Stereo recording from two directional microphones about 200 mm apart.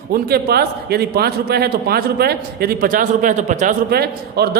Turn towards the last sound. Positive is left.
turn(degrees=-50)  # may be behind; listen again after turning